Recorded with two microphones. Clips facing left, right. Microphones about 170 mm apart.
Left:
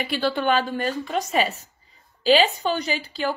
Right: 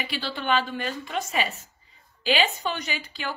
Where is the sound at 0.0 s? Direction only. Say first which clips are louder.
Left 8 dB; 50° left (ahead or behind).